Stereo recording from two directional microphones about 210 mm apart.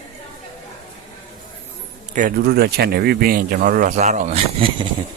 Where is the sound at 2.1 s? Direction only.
45° right (ahead or behind).